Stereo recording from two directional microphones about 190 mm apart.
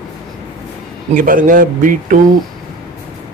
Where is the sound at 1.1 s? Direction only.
45° right (ahead or behind).